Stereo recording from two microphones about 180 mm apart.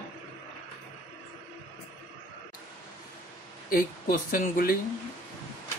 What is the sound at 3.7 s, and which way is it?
Speech, 50° left (ahead or behind).